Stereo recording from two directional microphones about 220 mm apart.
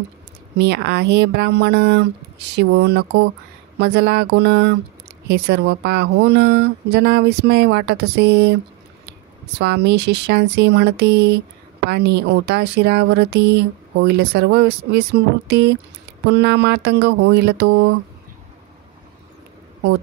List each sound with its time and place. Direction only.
0.6 s speech: 50° right (ahead or behind)
9.6 s speech: 50° right (ahead or behind)